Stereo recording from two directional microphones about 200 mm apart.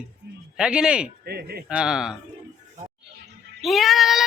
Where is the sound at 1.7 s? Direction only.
5° right (ahead or behind).